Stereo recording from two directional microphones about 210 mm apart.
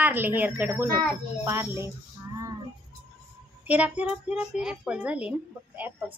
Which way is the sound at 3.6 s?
5° right (ahead or behind).